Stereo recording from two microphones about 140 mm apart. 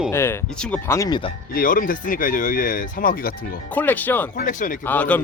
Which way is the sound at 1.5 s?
80° left.